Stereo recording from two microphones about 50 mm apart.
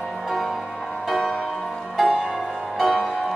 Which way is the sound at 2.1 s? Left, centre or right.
Centre.